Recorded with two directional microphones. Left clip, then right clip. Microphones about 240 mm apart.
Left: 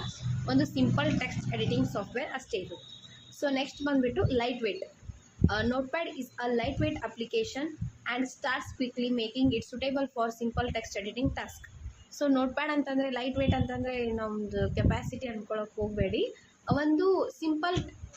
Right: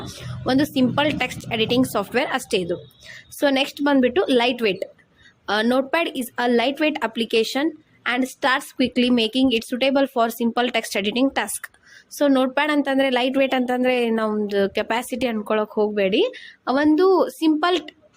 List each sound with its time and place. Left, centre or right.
0.4 s a woman's voice: right